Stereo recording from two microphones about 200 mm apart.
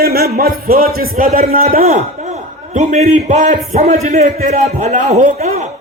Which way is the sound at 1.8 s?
35° right (ahead or behind).